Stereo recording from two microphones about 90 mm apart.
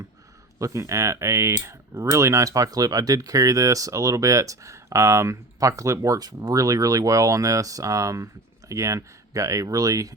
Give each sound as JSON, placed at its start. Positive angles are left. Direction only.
{"t": 0.6, "sound": "speech", "side_deg": -35}